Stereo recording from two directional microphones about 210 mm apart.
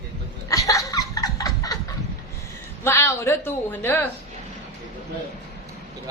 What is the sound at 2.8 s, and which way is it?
A woman's voice, 15° left (ahead or behind).